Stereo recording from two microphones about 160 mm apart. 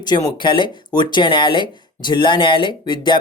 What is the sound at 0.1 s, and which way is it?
Speech, 30° left (ahead or behind).